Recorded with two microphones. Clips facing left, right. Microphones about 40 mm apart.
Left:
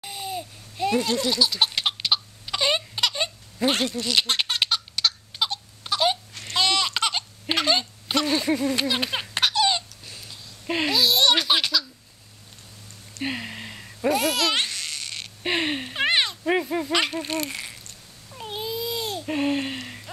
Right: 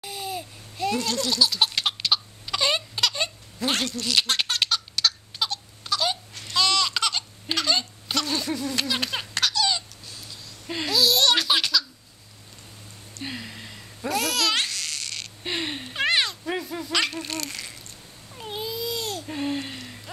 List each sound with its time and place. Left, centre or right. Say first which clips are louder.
0.0 s laughter: even; centre
6.5 s a sound: even; left
10.7 s speech: left 1 dB; centre
13.2 s babbling: left 5 dB; left
16.4 s speech: left 6 dB; left
18.3 s babbling: left 1 dB; centre
19.2 s babbling: left 4 dB; left